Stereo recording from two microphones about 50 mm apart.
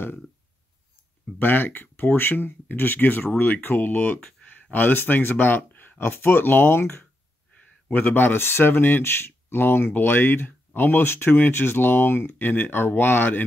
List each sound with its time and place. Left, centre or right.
1.4 s speech: left